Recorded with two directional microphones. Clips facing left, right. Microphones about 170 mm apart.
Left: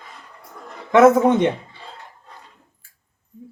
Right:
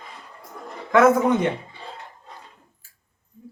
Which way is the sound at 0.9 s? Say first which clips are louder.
Left 4 dB; 25° left (ahead or behind).